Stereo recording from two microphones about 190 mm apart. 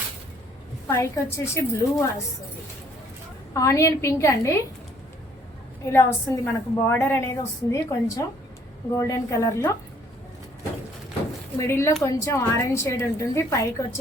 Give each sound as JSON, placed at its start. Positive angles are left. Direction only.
{"t": 0.9, "sound": "a woman's voice", "side_deg": 15}
{"t": 3.5, "sound": "a woman's voice", "side_deg": 15}
{"t": 5.9, "sound": "a woman's voice", "side_deg": 15}
{"t": 11.6, "sound": "a woman's voice", "side_deg": 15}